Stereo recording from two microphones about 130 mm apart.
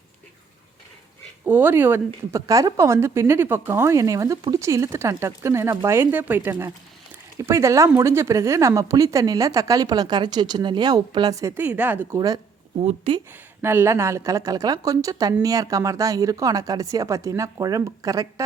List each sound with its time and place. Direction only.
1.5 s speech: 15° right (ahead or behind)
12.1 s speech: 30° right (ahead or behind)
13.1 s speech: 45° right (ahead or behind)
13.6 s speech: 20° right (ahead or behind)